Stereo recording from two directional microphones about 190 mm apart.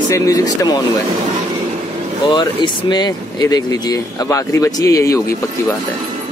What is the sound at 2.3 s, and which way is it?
Speech, 20° left (ahead or behind).